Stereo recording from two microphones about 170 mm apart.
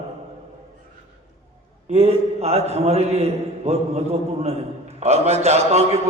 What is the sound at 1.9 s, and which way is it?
A man's voice, 40° right (ahead or behind).